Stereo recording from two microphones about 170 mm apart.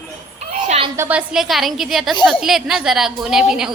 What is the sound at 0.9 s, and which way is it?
A woman's voice, 10° right (ahead or behind).